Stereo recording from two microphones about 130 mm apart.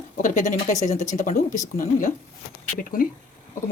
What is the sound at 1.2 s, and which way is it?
Speech, 80° left.